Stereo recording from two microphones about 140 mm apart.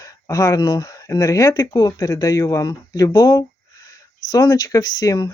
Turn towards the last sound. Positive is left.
turn(degrees=25)  # may be behind; listen again after turning